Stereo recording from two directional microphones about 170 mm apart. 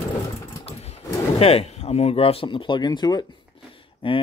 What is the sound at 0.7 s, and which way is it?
Speech, 35° left (ahead or behind).